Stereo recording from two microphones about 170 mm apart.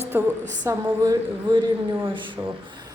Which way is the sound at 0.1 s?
15° right (ahead or behind).